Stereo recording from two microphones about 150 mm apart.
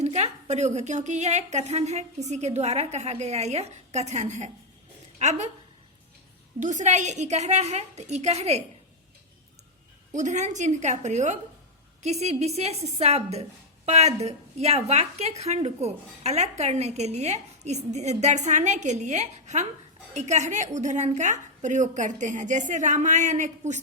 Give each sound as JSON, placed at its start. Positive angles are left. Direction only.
{"t": 0.0, "sound": "a woman's voice", "side_deg": -45}
{"t": 6.6, "sound": "a woman's voice", "side_deg": -55}
{"t": 10.2, "sound": "a woman's voice", "side_deg": -50}